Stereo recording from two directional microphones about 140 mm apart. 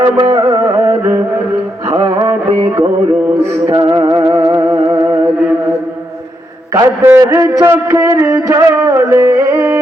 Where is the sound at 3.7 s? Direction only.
35° right (ahead or behind).